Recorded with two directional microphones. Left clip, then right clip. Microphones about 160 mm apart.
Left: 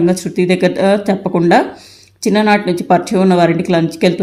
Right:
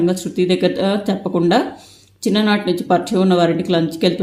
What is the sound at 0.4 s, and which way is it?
Speech, 15° left (ahead or behind).